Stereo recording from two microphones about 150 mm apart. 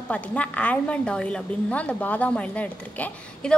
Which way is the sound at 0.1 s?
10° left (ahead or behind).